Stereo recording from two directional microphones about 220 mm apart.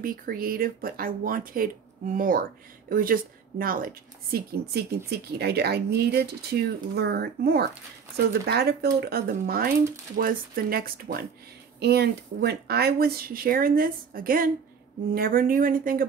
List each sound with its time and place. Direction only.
0.0 s a woman's voice: 40° right (ahead or behind)